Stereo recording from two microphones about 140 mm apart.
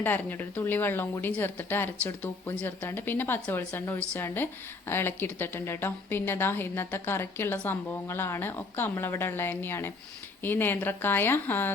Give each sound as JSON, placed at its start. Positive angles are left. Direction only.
{"t": 0.0, "sound": "a woman's voice", "side_deg": 15}